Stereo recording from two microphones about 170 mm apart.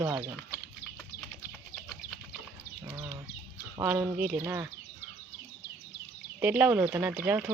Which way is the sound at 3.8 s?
10° right (ahead or behind).